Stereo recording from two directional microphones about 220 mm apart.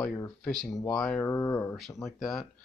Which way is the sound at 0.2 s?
5° left (ahead or behind).